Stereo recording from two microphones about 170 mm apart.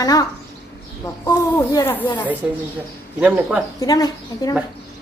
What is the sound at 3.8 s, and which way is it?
Speech, 20° left (ahead or behind).